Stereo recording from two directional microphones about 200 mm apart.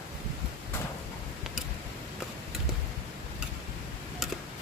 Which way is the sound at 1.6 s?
5° right (ahead or behind).